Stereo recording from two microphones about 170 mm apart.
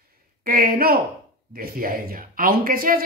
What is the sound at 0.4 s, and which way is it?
A woman's voice, 60° right (ahead or behind).